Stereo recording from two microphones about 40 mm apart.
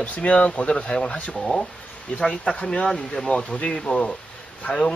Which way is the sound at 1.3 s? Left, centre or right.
Centre.